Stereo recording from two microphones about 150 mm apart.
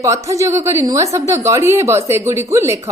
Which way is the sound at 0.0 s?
20° right (ahead or behind).